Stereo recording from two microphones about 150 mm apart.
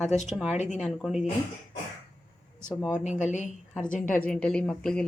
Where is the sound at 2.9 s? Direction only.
50° left (ahead or behind).